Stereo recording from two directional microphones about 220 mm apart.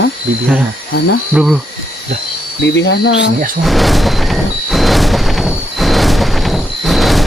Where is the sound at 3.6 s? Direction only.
Centre (ahead or behind).